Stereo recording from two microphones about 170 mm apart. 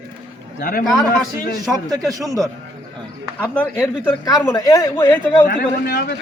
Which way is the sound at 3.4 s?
10° left (ahead or behind).